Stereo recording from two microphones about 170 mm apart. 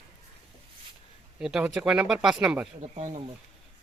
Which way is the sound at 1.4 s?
5° right (ahead or behind).